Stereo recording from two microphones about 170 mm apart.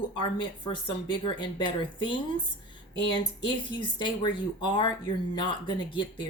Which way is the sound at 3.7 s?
30° left (ahead or behind).